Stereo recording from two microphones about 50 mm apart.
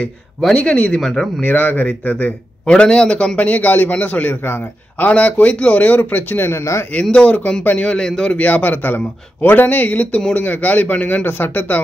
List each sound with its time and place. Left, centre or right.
0.6 s a man's voice: left
1.4 s speech: left
2.6 s a man's voice: centre
3.3 s speech: left
4.9 s speech: left
6.5 s speech: left
6.9 s a man's voice: left
8.4 s speech: left